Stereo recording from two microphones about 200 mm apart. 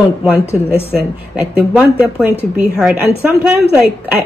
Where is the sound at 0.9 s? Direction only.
5° right (ahead or behind).